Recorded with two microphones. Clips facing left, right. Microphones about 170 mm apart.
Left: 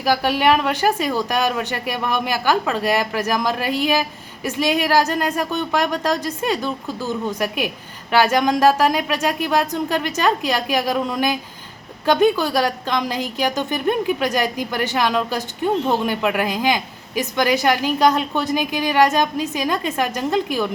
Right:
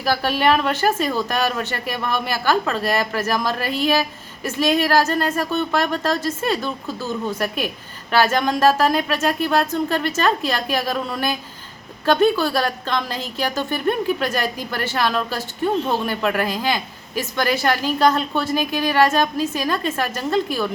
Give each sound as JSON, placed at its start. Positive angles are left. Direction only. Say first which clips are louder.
{"t": 0.0, "sound": "a woman's voice", "louder": "left 1 dB", "side_deg": 15}